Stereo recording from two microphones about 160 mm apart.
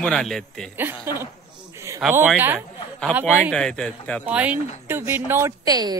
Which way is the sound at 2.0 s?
Centre (ahead or behind).